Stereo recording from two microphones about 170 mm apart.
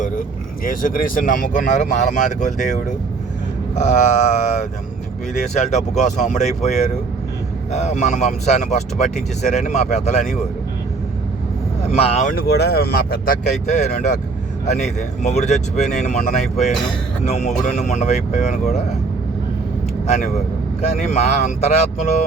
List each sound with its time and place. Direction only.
0.6 s speech: 55° left (ahead or behind)
11.9 s speech: 35° left (ahead or behind)
12.4 s speech: 70° left (ahead or behind); by 16.1 s 45° left (ahead or behind)
17.2 s speech: 40° left (ahead or behind)
20.8 s speech: 40° left (ahead or behind)